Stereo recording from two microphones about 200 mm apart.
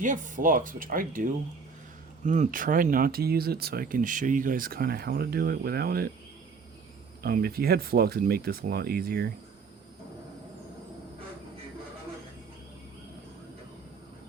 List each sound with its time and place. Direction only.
0.0 s speech: 40° right (ahead or behind)
7.2 s speech: 50° right (ahead or behind)